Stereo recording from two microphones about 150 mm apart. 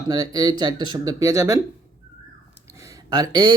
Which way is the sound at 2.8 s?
25° right (ahead or behind).